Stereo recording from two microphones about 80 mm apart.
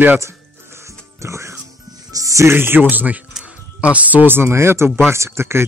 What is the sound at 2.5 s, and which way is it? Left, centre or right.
Speech, right.